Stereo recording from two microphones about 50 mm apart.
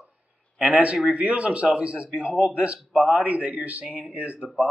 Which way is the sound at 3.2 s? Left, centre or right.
Right.